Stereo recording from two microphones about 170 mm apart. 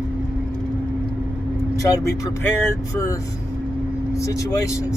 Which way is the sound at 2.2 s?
15° left (ahead or behind).